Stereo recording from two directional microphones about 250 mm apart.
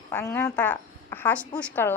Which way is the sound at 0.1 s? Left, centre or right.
Centre.